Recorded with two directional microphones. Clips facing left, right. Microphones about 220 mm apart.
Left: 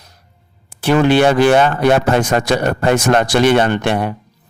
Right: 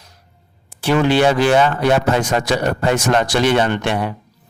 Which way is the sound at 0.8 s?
55° left (ahead or behind).